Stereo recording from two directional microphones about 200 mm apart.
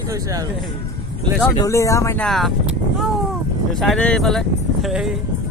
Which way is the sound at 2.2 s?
Centre (ahead or behind).